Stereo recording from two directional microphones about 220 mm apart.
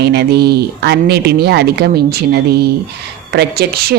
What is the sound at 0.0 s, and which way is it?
A woman's voice, 45° right (ahead or behind).